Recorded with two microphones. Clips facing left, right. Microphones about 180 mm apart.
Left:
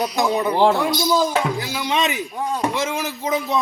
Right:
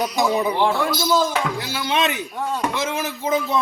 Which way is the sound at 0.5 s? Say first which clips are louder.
Left 4 dB; 40° left (ahead or behind).